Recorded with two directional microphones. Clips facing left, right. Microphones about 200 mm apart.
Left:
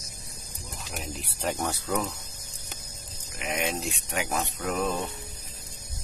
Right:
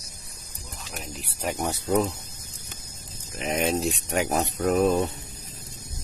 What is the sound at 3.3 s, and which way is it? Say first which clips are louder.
Speech: right 5 dB; 35° right (ahead or behind).